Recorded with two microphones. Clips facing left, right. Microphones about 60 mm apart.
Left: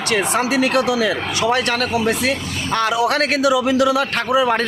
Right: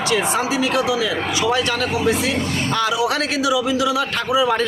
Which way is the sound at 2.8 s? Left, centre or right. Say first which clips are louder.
Left 4 dB; left.